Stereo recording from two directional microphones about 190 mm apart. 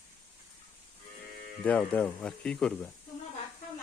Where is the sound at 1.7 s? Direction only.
10° left (ahead or behind).